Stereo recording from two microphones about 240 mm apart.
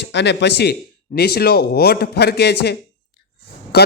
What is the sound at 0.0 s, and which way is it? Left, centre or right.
Speech, left.